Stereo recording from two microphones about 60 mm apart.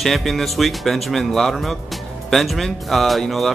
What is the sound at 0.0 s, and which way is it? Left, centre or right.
Speech, centre.